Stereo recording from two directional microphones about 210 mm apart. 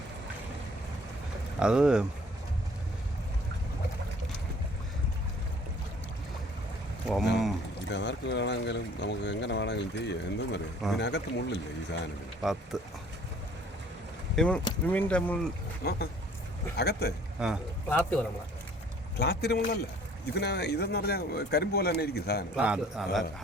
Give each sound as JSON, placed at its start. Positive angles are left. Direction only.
{"t": 1.5, "sound": "a man's voice", "side_deg": -5}
{"t": 7.9, "sound": "speech", "side_deg": 55}
{"t": 12.4, "sound": "a man's voice", "side_deg": 0}
{"t": 14.3, "sound": "speech", "side_deg": 5}
{"t": 15.8, "sound": "speech", "side_deg": 50}
{"t": 17.4, "sound": "a man's voice", "side_deg": -5}
{"t": 17.8, "sound": "speech", "side_deg": 5}
{"t": 19.2, "sound": "speech", "side_deg": 50}
{"t": 22.5, "sound": "a man's voice", "side_deg": -5}